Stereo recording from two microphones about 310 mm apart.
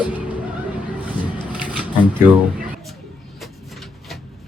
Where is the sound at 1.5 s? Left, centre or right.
Centre.